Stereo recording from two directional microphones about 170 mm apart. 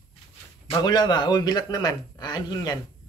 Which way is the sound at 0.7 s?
25° left (ahead or behind).